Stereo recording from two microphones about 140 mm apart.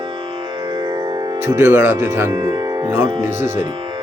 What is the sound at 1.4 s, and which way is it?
Speech, 20° right (ahead or behind).